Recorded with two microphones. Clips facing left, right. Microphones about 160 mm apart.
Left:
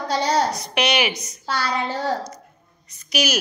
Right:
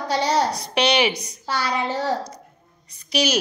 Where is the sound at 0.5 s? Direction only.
30° right (ahead or behind).